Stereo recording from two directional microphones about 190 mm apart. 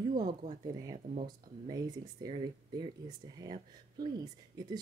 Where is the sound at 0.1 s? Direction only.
25° right (ahead or behind).